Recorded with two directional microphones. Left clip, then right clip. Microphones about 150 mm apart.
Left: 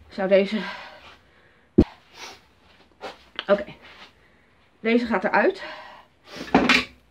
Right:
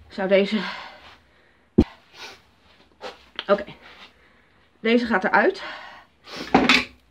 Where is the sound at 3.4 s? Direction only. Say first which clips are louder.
Even; 10° left (ahead or behind).